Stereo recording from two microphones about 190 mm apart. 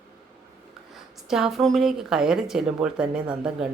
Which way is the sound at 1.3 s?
Centre (ahead or behind).